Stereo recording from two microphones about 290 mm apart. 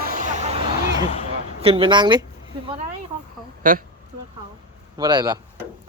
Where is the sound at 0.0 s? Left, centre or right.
Right.